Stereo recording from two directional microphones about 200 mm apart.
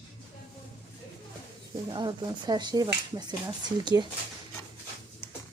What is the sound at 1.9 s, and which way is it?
Speech, 20° right (ahead or behind).